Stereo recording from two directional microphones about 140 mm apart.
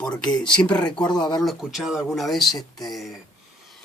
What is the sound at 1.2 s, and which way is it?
Speech, 30° left (ahead or behind).